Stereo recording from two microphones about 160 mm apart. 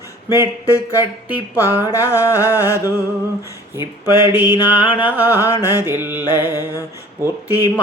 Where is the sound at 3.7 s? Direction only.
15° right (ahead or behind).